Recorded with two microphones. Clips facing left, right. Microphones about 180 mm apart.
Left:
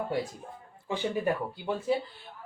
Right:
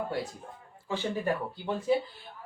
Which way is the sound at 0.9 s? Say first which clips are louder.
Left 1 dB; 15° left (ahead or behind).